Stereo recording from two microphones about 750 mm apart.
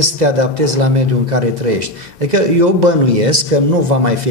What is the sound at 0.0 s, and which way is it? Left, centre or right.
Speech, right.